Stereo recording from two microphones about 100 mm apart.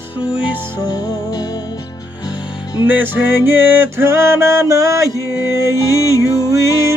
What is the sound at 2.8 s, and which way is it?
Music, 20° right (ahead or behind).